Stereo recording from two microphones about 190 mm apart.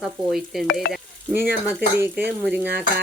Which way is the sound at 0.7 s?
55° left (ahead or behind).